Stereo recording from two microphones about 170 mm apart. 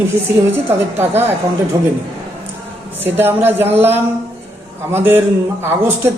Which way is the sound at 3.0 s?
15° right (ahead or behind).